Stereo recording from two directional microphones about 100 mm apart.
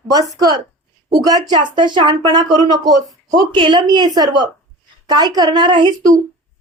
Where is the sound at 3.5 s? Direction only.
55° right (ahead or behind).